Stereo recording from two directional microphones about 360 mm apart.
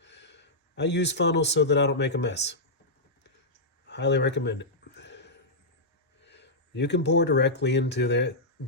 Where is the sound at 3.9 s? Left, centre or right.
Left.